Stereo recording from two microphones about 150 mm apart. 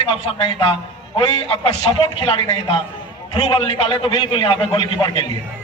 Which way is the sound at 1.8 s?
35° left (ahead or behind).